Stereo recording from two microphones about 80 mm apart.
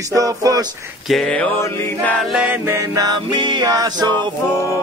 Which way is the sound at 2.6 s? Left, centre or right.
Right.